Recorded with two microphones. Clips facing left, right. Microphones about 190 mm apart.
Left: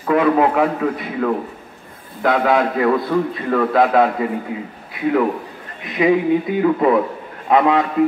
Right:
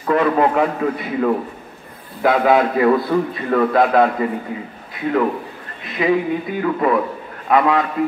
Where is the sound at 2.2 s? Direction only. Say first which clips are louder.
Right 2 dB; 5° right (ahead or behind).